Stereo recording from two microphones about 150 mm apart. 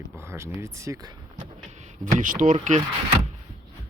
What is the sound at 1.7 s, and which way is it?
Speech, 55° right (ahead or behind).